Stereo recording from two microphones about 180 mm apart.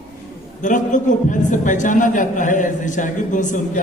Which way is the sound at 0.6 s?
45° left (ahead or behind).